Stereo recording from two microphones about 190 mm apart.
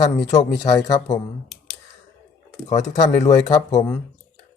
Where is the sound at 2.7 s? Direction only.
40° left (ahead or behind).